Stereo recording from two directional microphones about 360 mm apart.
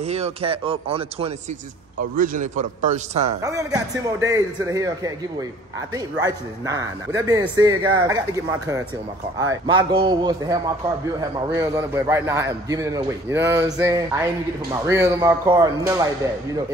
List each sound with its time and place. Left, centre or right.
0.0 s a man's voice: centre